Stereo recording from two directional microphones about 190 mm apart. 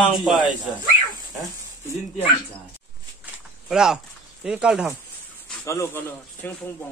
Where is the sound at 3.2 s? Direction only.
5° right (ahead or behind).